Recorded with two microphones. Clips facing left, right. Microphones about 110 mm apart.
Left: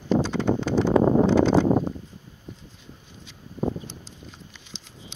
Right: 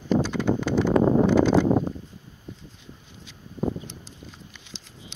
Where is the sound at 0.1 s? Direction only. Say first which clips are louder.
Left 1 dB; 30° left (ahead or behind).